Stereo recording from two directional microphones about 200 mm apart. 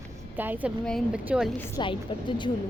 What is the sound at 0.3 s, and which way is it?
Speech, 10° right (ahead or behind).